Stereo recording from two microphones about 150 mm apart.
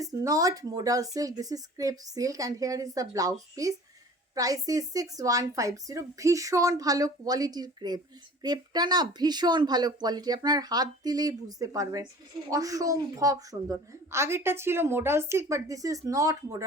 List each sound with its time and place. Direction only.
0.0 s a woman's voice: 25° right (ahead or behind)